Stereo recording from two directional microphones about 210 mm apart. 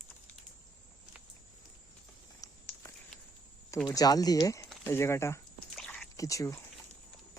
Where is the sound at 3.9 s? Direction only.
20° left (ahead or behind).